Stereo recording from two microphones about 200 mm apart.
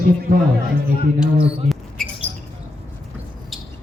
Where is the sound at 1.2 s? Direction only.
Centre (ahead or behind).